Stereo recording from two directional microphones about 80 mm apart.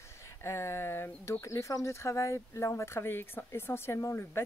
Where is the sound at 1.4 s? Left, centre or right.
Left.